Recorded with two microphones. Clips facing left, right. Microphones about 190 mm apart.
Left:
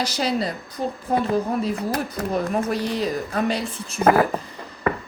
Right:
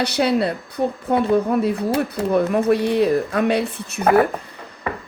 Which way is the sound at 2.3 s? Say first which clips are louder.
Right 7 dB; 60° right (ahead or behind).